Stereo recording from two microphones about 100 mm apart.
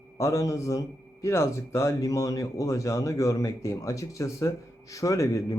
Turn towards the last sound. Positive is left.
turn(degrees=35)  # may be behind; listen again after turning